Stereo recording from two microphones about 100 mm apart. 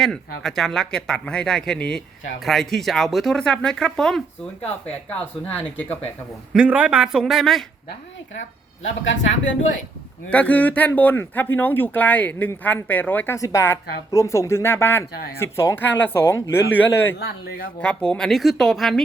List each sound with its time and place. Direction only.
0.0 s speech: 5° left (ahead or behind)
4.6 s speech: 15° left (ahead or behind)
6.5 s speech: 10° right (ahead or behind)
10.2 s speech: 15° left (ahead or behind)
13.3 s a woman's voice: 30° left (ahead or behind)
17.7 s speech: 10° left (ahead or behind)